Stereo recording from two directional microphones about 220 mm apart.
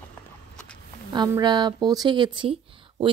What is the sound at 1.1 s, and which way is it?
Speech, 20° right (ahead or behind).